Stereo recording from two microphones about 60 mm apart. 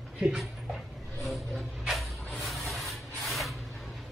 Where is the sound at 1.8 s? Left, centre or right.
Centre.